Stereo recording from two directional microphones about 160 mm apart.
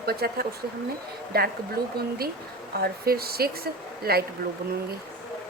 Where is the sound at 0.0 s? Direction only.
75° right (ahead or behind).